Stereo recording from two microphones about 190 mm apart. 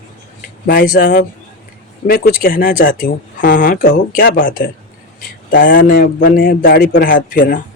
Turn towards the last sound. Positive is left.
turn(degrees=45)  # may be behind; listen again after turning